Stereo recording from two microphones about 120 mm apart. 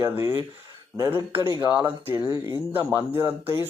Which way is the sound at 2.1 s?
35° right (ahead or behind).